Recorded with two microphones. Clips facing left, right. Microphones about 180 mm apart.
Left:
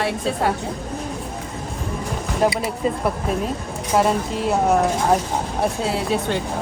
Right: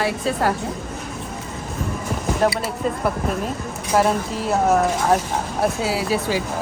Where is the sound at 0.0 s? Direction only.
Centre (ahead or behind).